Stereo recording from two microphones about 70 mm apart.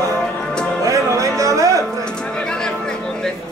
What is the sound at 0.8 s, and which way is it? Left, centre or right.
Music, right.